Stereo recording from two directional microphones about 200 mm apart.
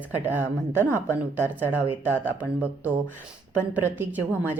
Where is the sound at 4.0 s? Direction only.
10° right (ahead or behind).